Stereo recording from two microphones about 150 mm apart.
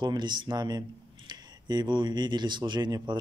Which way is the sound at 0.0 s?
30° right (ahead or behind).